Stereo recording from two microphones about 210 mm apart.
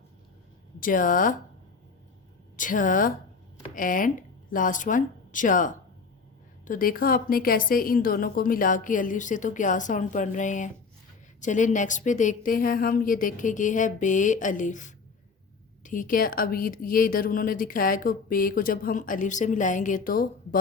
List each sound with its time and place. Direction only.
0.8 s a woman's voice: 40° left (ahead or behind)
2.6 s a woman's voice: 40° left (ahead or behind)